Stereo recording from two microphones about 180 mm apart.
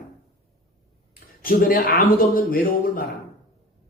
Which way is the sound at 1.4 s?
55° left (ahead or behind).